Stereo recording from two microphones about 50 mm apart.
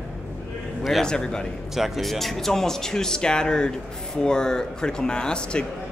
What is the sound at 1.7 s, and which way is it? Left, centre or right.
Speech, centre.